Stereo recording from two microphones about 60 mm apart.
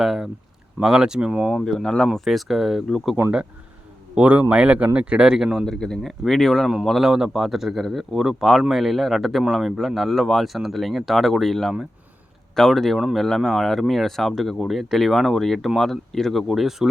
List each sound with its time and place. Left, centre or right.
0.0 s speech: centre
1.6 s speech: centre
4.1 s a man's voice: right
5.6 s speech: centre
7.0 s speech: centre